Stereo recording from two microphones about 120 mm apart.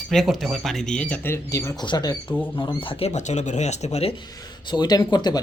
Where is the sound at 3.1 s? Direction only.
75° left (ahead or behind).